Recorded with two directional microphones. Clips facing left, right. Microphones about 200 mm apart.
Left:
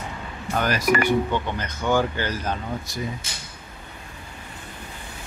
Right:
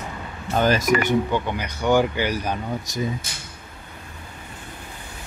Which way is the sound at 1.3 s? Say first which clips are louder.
Right 2 dB; 15° right (ahead or behind).